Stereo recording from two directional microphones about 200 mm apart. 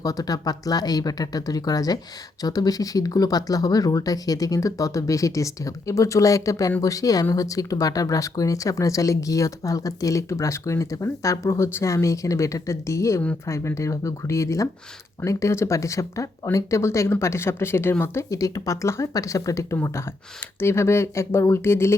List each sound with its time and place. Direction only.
0.0 s speech: 20° left (ahead or behind)